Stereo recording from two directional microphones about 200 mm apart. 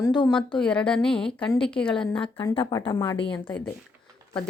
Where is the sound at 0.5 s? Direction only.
5° left (ahead or behind).